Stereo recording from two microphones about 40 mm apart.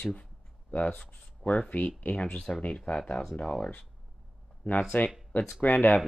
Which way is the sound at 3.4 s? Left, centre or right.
Centre.